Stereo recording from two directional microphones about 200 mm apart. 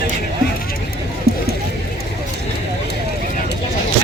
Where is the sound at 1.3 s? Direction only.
50° left (ahead or behind).